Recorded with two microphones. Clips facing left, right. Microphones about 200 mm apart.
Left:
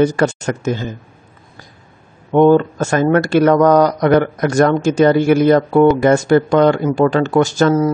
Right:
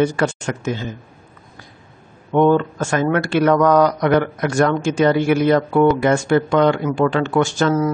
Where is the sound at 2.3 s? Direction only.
35° left (ahead or behind).